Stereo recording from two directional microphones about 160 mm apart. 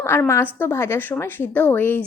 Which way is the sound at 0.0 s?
15° left (ahead or behind).